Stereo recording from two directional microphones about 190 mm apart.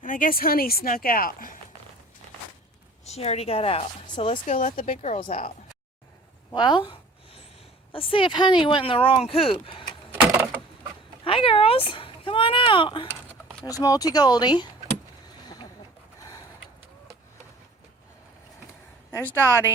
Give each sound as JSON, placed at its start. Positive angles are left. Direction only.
{"t": 0.0, "sound": "speech", "side_deg": 45}
{"t": 3.0, "sound": "a woman's voice", "side_deg": 35}
{"t": 6.5, "sound": "a sound", "side_deg": 25}
{"t": 7.9, "sound": "speech", "side_deg": 30}
{"t": 10.3, "sound": "door", "side_deg": -10}
{"t": 11.2, "sound": "speech", "side_deg": 30}
{"t": 19.1, "sound": "a woman's voice", "side_deg": 10}